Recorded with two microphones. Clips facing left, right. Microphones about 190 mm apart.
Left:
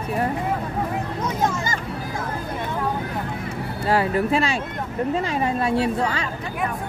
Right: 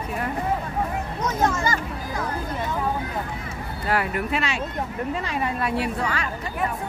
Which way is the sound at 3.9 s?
30° left (ahead or behind).